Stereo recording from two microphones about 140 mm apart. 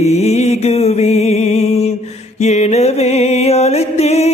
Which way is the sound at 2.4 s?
50° left (ahead or behind).